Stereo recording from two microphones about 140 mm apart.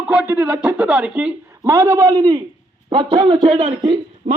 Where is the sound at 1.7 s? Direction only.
20° right (ahead or behind).